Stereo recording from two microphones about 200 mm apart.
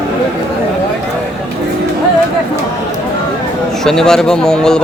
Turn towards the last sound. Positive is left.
turn(degrees=5)  # may be behind; listen again after turning